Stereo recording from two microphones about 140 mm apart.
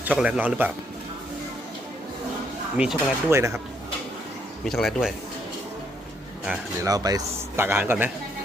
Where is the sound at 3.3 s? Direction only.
20° right (ahead or behind).